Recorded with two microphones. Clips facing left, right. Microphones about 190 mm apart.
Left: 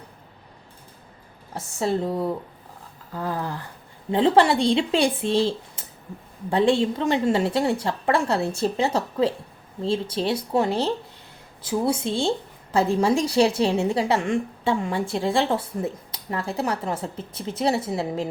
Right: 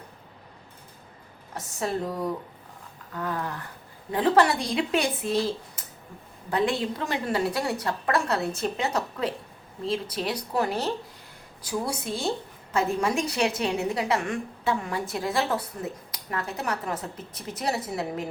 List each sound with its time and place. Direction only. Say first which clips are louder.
1.5 s a woman's voice: left 5 dB; 30° left (ahead or behind)